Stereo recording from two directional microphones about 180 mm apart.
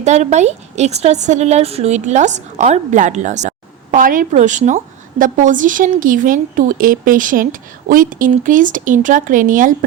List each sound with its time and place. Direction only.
0.0 s a woman's voice: 40° right (ahead or behind)